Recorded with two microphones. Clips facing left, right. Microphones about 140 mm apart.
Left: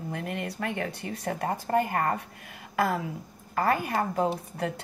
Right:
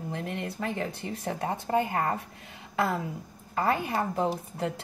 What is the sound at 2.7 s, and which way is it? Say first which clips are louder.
A woman's voice: left 1 dB; 25° right (ahead or behind).